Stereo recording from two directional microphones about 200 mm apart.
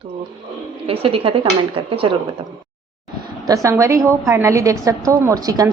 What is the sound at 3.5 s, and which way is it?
A woman's voice, 15° right (ahead or behind).